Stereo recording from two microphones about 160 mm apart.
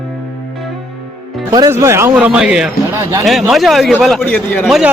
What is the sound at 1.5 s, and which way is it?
A man's voice, 20° right (ahead or behind).